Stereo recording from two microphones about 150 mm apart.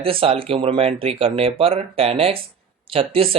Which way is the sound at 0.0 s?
40° right (ahead or behind).